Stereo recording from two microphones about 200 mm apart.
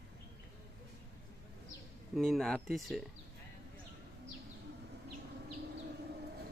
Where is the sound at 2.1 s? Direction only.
Centre (ahead or behind).